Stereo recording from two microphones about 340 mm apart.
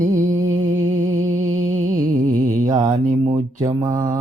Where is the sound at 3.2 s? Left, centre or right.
Centre.